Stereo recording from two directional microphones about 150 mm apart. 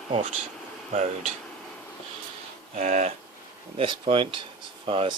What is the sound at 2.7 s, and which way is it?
Speech, 45° right (ahead or behind).